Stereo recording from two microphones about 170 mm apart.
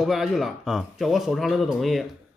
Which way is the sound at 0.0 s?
Centre (ahead or behind).